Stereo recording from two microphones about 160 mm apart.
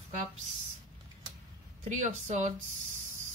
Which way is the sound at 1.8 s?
50° right (ahead or behind).